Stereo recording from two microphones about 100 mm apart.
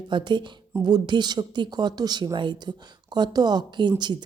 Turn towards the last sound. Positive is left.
turn(degrees=-50)  # may be behind; listen again after turning